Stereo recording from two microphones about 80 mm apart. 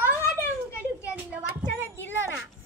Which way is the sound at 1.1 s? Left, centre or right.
Centre.